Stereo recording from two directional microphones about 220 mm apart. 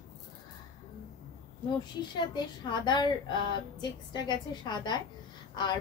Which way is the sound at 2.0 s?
20° left (ahead or behind).